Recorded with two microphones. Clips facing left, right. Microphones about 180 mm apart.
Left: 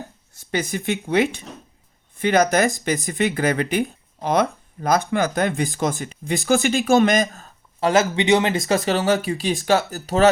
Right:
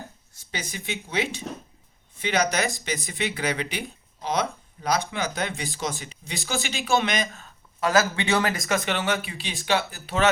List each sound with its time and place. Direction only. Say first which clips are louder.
0.5 s speech: left 10 dB; 55° left (ahead or behind); by 8.6 s 20° left (ahead or behind)
8.7 s speech: left 8 dB; 35° left (ahead or behind)